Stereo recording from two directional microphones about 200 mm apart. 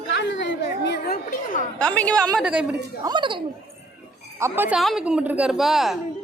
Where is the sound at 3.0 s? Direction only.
25° right (ahead or behind).